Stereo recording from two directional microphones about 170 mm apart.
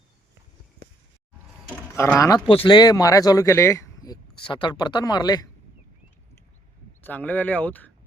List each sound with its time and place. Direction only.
2.0 s speech: 15° left (ahead or behind)
2.5 s speech: 30° left (ahead or behind)
7.0 s speech: 10° left (ahead or behind)